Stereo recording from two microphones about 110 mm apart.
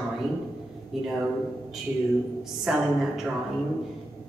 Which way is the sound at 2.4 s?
5° right (ahead or behind).